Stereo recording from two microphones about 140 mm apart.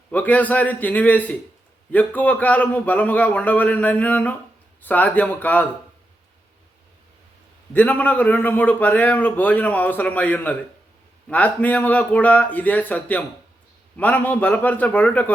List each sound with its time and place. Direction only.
0.1 s a man's voice: 10° left (ahead or behind)
7.7 s a man's voice: 10° left (ahead or behind)